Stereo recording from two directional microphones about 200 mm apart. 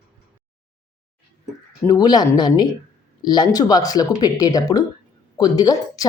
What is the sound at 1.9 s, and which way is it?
Speech, 20° left (ahead or behind).